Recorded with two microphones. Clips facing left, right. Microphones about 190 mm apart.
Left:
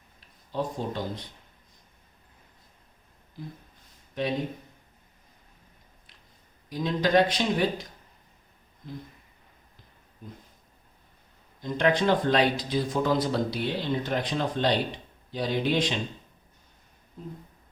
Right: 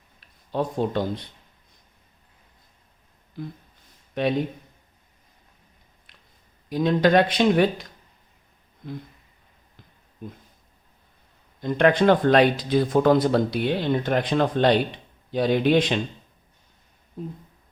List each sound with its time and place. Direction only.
0.5 s speech: 65° right (ahead or behind)
3.4 s speech: 65° right (ahead or behind)
6.7 s speech: 60° right (ahead or behind)
11.6 s speech: 60° right (ahead or behind)